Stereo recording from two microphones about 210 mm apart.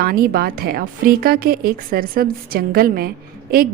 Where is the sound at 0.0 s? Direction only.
45° right (ahead or behind).